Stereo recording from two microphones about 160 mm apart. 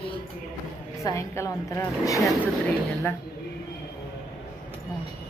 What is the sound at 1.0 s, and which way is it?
A woman's voice, 20° left (ahead or behind).